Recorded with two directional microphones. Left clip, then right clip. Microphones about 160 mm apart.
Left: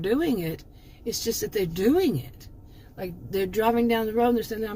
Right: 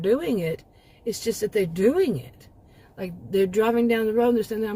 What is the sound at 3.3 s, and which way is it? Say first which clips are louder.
Speech: right 3 dB; 30° right (ahead or behind).